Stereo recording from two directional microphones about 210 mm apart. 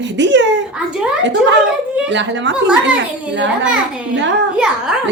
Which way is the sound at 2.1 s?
60° right (ahead or behind).